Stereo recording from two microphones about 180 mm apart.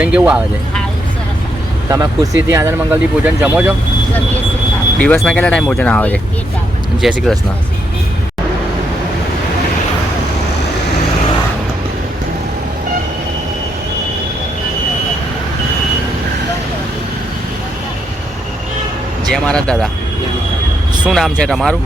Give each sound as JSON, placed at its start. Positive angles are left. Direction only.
{"t": 0.0, "sound": "speech", "side_deg": -5}
{"t": 1.9, "sound": "speech", "side_deg": -20}
{"t": 5.0, "sound": "speech", "side_deg": 5}
{"t": 19.3, "sound": "speech", "side_deg": 5}
{"t": 21.0, "sound": "speech", "side_deg": 0}